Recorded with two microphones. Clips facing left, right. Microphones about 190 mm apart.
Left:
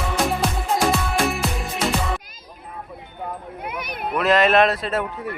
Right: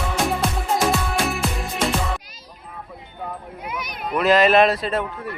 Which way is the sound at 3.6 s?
55° left (ahead or behind).